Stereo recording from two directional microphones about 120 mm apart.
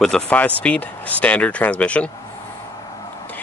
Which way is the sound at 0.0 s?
10° left (ahead or behind).